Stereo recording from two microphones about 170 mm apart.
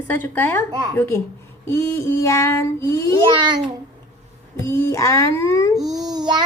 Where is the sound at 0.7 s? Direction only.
20° right (ahead or behind).